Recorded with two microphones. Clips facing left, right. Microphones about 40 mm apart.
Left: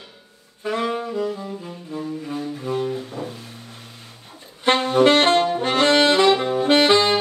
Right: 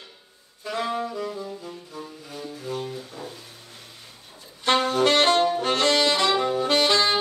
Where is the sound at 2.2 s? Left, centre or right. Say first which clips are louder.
Left 7 dB; left.